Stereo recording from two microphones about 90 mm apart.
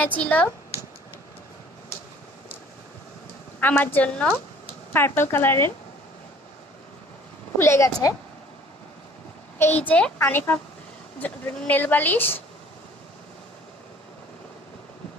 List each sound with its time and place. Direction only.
0.0 s a woman's voice: 15° left (ahead or behind)
3.6 s a woman's voice: 20° left (ahead or behind)
7.6 s speech: 30° left (ahead or behind)
9.6 s speech: 20° left (ahead or behind)